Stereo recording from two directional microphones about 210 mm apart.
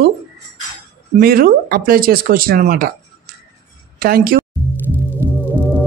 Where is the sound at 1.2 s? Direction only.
45° right (ahead or behind).